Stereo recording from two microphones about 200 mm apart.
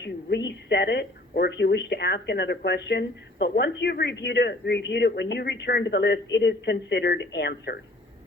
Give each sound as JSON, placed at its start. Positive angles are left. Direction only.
{"t": 0.0, "sound": "speech", "side_deg": 60}